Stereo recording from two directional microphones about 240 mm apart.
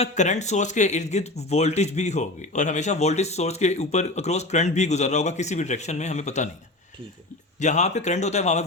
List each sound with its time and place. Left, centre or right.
0.0 s speech: left
7.6 s speech: left